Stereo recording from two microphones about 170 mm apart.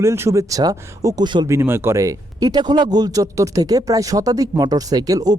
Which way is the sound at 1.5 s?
15° right (ahead or behind).